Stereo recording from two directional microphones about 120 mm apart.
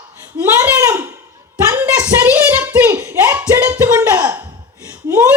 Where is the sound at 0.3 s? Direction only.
15° right (ahead or behind).